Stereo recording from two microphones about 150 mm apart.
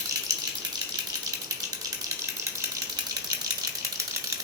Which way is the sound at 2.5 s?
20° right (ahead or behind).